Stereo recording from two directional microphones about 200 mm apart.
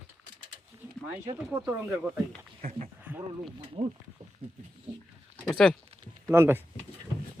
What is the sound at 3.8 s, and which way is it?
Speech, 25° right (ahead or behind).